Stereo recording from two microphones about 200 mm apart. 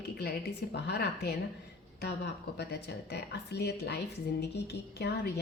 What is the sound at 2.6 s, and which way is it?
A woman's voice, 55° left (ahead or behind).